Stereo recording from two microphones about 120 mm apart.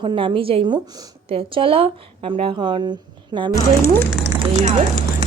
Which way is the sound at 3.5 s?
25° left (ahead or behind).